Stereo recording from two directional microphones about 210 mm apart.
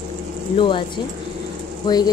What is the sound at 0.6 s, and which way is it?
Speech, 25° left (ahead or behind).